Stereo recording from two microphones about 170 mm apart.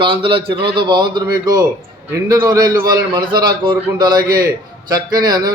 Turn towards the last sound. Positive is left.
turn(degrees=-25)  # may be behind; listen again after turning